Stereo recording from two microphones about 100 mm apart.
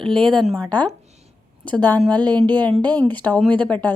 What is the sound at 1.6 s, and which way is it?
Speech, 15° left (ahead or behind).